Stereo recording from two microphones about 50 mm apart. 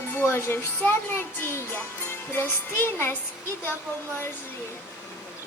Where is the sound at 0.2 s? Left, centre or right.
Left.